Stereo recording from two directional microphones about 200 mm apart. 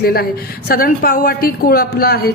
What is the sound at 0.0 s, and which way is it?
A woman's voice, 50° left (ahead or behind).